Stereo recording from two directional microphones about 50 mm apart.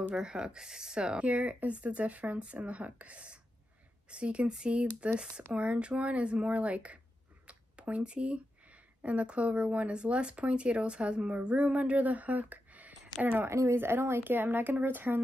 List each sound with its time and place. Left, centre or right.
0.1 s speech: centre
1.3 s speech: right
7.4 s a sound: right
9.0 s speech: right
13.5 s speech: right
13.7 s speech: right